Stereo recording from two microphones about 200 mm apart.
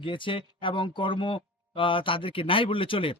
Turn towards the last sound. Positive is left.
turn(degrees=25)  # may be behind; listen again after turning